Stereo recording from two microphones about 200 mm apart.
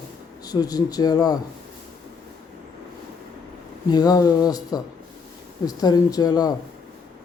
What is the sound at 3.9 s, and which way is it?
Speech, 20° left (ahead or behind).